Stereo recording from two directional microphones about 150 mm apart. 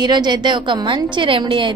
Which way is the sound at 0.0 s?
30° right (ahead or behind).